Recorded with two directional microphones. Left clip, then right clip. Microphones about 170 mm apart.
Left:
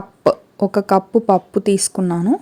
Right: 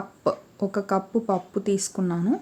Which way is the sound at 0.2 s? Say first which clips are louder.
Left 10 dB; 45° left (ahead or behind).